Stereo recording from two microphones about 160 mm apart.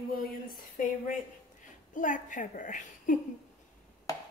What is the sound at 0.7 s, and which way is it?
A woman's voice, 55° left (ahead or behind).